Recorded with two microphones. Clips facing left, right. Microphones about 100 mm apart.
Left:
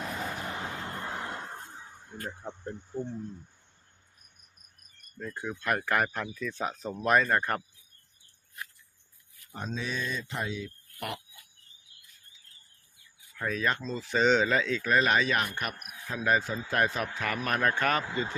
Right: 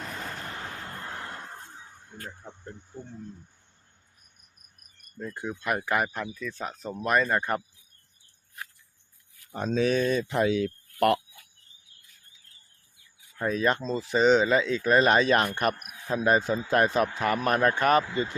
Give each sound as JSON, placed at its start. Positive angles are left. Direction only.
{"t": 0.0, "sound": "a sound", "side_deg": 5}
{"t": 1.7, "sound": "a sound", "side_deg": 5}
{"t": 2.3, "sound": "speech", "side_deg": 20}
{"t": 5.2, "sound": "speech", "side_deg": -15}
{"t": 6.5, "sound": "speech", "side_deg": 15}
{"t": 6.8, "sound": "speech", "side_deg": 0}
{"t": 9.5, "sound": "speech", "side_deg": -80}
{"t": 13.4, "sound": "speech", "side_deg": -25}
{"t": 14.0, "sound": "a man's voice", "side_deg": -15}